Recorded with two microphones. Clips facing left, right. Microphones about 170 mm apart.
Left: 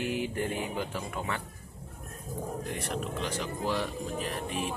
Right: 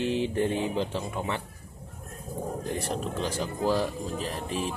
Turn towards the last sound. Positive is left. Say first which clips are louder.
# right 2 dB
turn(degrees=-35)  # may be behind; listen again after turning